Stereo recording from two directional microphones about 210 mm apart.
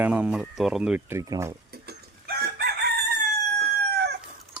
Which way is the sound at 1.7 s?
50° right (ahead or behind).